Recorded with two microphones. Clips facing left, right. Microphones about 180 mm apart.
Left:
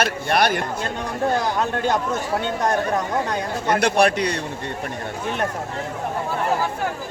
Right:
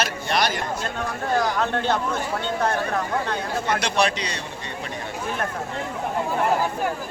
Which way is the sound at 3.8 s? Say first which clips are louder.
Left 5 dB; 55° left (ahead or behind).